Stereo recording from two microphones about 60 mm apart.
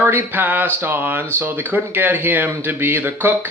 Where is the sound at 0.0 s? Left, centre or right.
Right.